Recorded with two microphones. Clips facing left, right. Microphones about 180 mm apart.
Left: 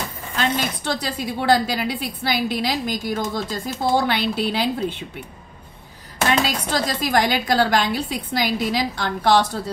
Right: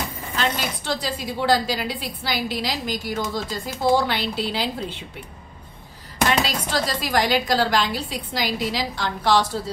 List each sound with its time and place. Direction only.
0.4 s a woman's voice: 55° left (ahead or behind)
6.4 s speech: 50° left (ahead or behind)